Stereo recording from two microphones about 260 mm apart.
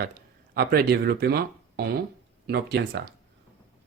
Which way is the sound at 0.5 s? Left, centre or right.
Right.